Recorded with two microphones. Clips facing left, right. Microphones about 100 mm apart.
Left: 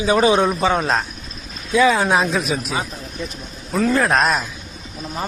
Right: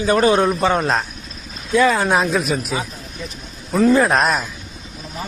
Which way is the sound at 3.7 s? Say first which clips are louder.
Right 3 dB; 5° right (ahead or behind).